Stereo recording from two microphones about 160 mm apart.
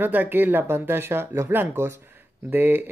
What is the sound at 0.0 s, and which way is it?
Speech, 10° right (ahead or behind).